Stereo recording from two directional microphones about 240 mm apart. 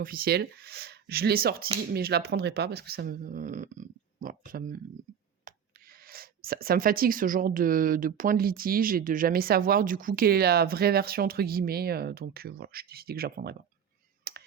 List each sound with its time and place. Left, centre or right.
0.0 s speech: right
14.3 s finger snapping: right